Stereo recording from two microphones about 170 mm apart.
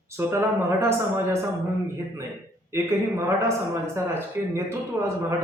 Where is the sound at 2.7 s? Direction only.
15° right (ahead or behind).